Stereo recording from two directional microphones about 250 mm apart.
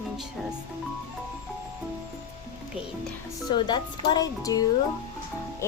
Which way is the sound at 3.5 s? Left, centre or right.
Centre.